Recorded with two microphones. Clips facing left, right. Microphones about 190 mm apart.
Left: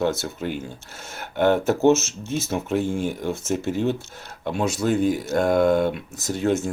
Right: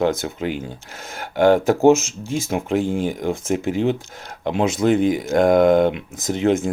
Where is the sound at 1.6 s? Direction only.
10° right (ahead or behind).